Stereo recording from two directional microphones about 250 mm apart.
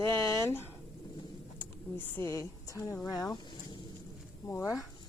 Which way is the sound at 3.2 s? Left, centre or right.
Centre.